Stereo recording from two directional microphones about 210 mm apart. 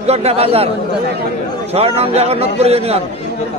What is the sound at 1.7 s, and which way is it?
A man's voice, 30° right (ahead or behind).